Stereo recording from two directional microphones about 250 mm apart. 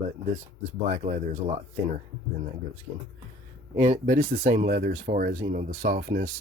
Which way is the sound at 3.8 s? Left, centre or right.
Right.